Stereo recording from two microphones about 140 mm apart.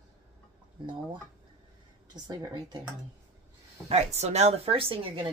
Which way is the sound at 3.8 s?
50° right (ahead or behind).